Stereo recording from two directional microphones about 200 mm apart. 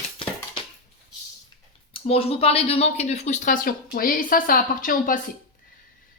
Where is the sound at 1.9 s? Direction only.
30° left (ahead or behind).